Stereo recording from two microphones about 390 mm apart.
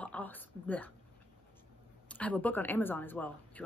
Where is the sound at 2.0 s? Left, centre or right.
Centre.